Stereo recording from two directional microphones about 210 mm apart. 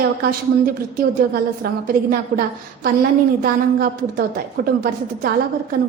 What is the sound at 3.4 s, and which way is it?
A woman's voice, 45° right (ahead or behind).